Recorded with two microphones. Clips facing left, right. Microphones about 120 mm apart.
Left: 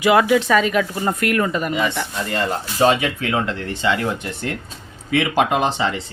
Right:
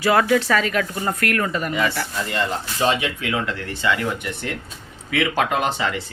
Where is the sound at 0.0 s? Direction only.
15° left (ahead or behind).